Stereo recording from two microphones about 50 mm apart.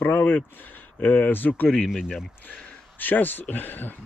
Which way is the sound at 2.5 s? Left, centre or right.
Left.